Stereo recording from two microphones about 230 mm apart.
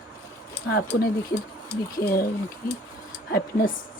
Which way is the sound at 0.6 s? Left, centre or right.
Left.